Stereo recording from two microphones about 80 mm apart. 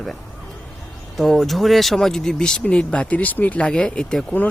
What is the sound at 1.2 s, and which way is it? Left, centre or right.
Speech, centre.